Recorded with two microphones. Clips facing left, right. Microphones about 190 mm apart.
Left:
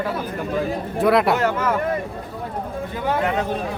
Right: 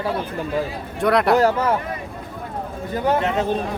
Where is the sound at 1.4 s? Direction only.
35° right (ahead or behind).